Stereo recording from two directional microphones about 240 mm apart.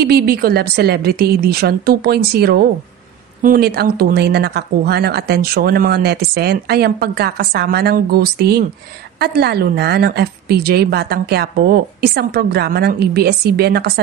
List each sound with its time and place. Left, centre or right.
0.0 s speech: right